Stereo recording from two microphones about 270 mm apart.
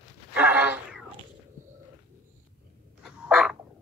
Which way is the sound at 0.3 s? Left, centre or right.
Centre.